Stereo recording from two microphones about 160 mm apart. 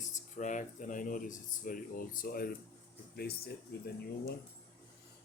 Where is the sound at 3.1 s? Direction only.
80° left.